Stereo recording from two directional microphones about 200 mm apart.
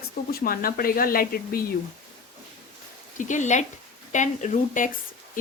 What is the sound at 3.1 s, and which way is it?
Speech, 40° left (ahead or behind).